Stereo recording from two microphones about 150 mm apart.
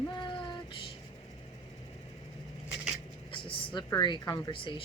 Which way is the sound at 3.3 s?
35° left (ahead or behind).